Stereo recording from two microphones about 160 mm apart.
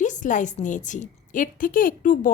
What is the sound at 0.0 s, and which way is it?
A woman's voice, 50° left (ahead or behind).